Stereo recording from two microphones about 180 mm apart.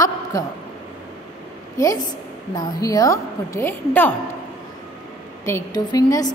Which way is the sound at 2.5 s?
20° left (ahead or behind).